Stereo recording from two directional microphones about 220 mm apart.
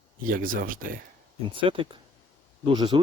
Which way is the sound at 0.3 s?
40° right (ahead or behind).